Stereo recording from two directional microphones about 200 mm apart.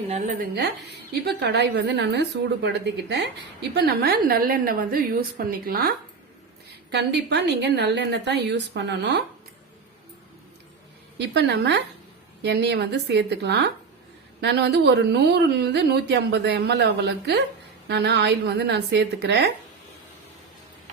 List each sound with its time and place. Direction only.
0.5 s a woman's voice: 55° right (ahead or behind)
6.9 s a woman's voice: 55° right (ahead or behind)
11.2 s a woman's voice: 60° right (ahead or behind)